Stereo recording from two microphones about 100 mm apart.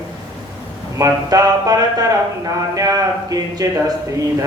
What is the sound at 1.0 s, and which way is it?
Speech, 35° right (ahead or behind).